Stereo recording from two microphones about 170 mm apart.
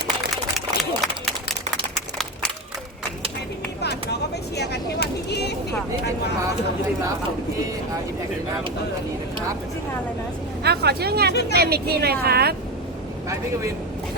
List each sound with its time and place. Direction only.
0.5 s a sound: centre (ahead or behind)
4.5 s vehicle: 75° left (ahead or behind)
10.6 s speech: 75° right (ahead or behind)